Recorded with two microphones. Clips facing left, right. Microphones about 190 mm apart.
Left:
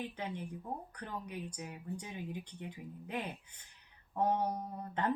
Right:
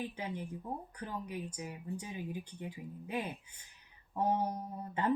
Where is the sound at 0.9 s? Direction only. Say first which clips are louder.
Right 2 dB; 10° right (ahead or behind).